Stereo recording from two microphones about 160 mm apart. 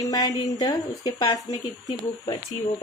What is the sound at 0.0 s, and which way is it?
Speech, 25° left (ahead or behind).